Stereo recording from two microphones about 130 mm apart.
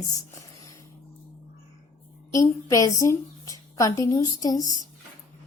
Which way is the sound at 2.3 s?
25° left (ahead or behind).